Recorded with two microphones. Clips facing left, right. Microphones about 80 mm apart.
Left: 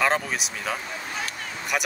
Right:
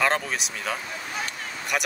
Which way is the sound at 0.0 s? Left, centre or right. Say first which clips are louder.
Left 1 dB; centre.